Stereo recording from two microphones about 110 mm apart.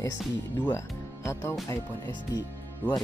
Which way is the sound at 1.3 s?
25° left (ahead or behind).